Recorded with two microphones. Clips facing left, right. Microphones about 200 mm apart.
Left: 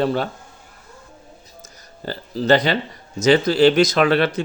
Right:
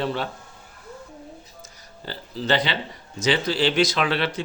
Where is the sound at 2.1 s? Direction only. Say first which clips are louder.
Left 7 dB; 45° left (ahead or behind).